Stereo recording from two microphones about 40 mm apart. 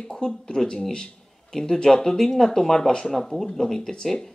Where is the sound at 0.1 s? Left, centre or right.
Centre.